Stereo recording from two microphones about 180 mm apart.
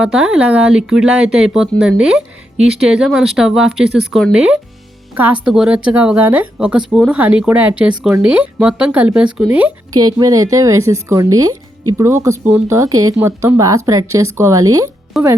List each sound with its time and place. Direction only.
0.0 s speech: 5° right (ahead or behind)
9.9 s a woman's voice: 20° right (ahead or behind)
15.1 s speech: centre (ahead or behind)